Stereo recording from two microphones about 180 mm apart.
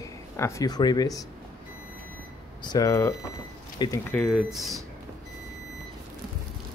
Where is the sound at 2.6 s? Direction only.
20° left (ahead or behind).